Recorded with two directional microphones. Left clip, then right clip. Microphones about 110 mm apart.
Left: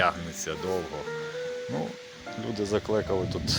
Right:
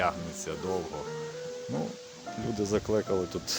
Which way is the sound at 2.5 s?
25° right (ahead or behind).